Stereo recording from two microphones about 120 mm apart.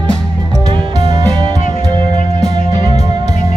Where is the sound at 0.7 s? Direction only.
30° right (ahead or behind).